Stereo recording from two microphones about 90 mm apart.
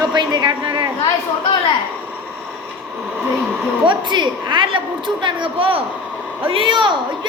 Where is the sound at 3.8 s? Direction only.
60° right (ahead or behind); by 5.8 s 90° right.